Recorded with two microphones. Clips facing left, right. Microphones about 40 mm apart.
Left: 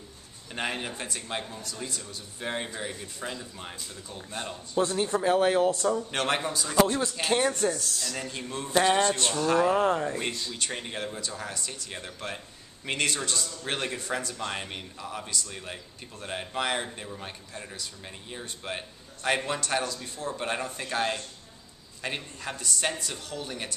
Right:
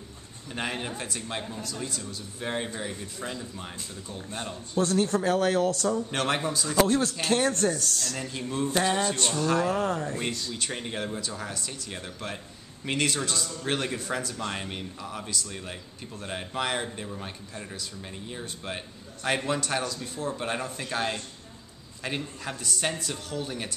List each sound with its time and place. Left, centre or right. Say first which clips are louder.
0.5 s speech: even; centre
4.7 s speech: right 1 dB; centre
5.9 s speech: even; centre
8.7 s a sound: left 4 dB; centre
9.3 s speech: left 2 dB; centre
9.8 s speech: left 3 dB; centre
10.5 s speech: right 1 dB; centre